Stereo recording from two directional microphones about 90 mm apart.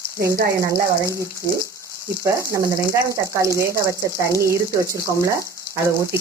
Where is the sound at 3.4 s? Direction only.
35° right (ahead or behind).